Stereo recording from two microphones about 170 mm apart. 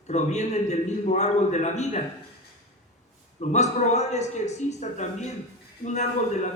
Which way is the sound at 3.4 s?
40° left (ahead or behind).